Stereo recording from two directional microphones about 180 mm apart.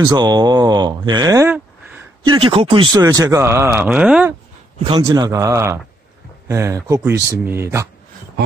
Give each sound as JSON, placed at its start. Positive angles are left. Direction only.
{"t": 0.0, "sound": "speech", "side_deg": -20}
{"t": 2.3, "sound": "speech", "side_deg": -30}
{"t": 4.7, "sound": "a man's voice", "side_deg": -30}
{"t": 5.0, "sound": "speech", "side_deg": -20}